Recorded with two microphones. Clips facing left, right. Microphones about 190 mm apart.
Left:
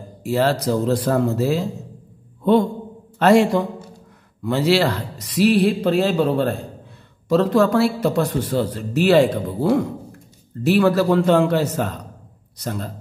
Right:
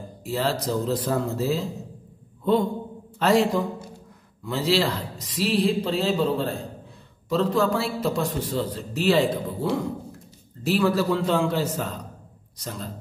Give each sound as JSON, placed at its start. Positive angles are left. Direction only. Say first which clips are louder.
{"t": 0.2, "sound": "a man's voice", "louder": "left 7 dB", "side_deg": 70}
{"t": 3.2, "sound": "a man's voice", "louder": "left 6 dB", "side_deg": 70}